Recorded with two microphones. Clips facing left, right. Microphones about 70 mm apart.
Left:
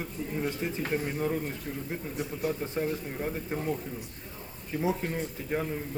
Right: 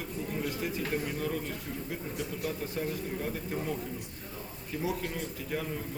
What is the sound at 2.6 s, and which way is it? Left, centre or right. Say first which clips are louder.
A man's voice: left 3 dB; left.